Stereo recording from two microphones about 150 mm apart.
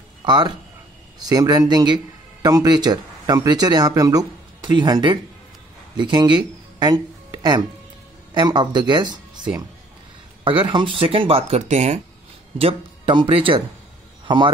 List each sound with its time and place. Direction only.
0.2 s speech: 30° right (ahead or behind); by 12.0 s 50° right (ahead or behind)
12.5 s a man's voice: 35° right (ahead or behind)